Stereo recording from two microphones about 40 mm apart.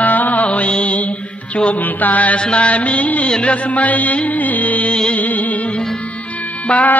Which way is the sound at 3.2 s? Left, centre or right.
Left.